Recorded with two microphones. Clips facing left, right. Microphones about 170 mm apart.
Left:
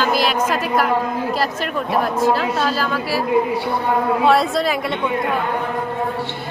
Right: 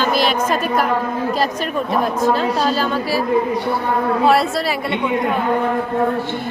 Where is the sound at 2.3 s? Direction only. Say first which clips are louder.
Right 2 dB; 20° right (ahead or behind).